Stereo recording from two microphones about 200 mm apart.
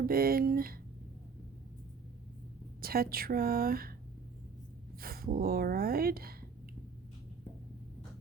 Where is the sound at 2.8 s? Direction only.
50° right (ahead or behind).